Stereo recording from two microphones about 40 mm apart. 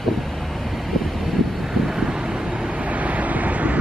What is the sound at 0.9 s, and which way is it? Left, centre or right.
Vehicle, centre.